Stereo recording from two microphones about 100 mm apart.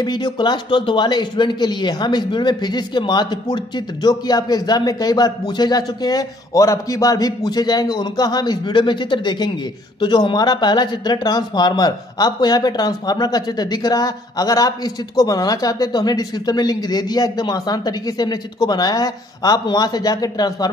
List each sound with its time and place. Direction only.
0.0 s speech: 45° left (ahead or behind)